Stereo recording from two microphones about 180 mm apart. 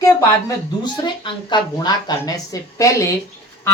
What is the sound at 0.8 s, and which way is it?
Speech, 25° left (ahead or behind).